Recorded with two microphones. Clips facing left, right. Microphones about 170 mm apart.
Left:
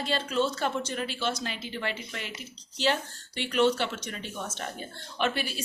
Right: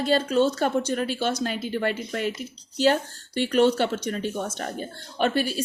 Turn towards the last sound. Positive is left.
turn(degrees=-40)  # may be behind; listen again after turning